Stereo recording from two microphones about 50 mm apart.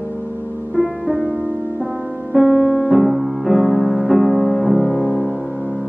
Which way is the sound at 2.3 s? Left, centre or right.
Centre.